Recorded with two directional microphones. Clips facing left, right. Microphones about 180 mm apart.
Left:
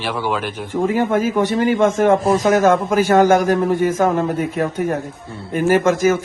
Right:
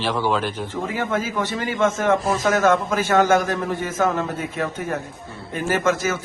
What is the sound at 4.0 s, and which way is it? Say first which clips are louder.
A man's voice: left 5 dB; 35° left (ahead or behind).